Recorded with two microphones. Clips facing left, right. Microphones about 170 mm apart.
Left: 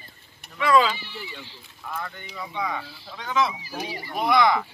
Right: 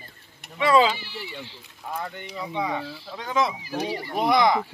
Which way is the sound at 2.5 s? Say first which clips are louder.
Right 2 dB; 30° right (ahead or behind).